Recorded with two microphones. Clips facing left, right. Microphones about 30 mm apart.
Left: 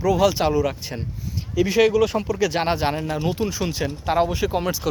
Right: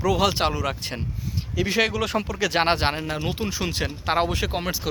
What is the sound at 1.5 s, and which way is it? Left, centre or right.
Speech, right.